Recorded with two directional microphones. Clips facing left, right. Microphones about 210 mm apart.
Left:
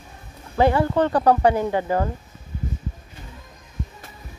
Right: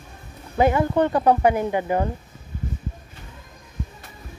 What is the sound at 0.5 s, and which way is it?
Speech, 20° right (ahead or behind).